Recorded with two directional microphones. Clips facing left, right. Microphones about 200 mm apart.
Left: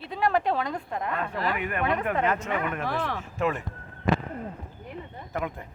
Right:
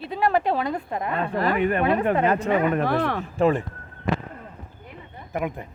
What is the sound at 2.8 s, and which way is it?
Speech, 60° right (ahead or behind).